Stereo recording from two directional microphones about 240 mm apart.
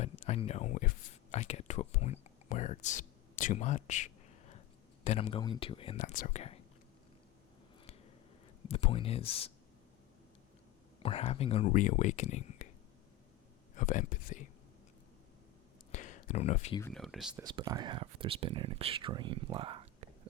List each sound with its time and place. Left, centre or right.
0.0 s a sound: left
5.0 s speech: left
6.0 s speech: left
8.6 s speech: left
11.0 s speech: left
13.7 s speech: left
15.9 s a sound: left
16.9 s speech: centre
17.4 s speech: centre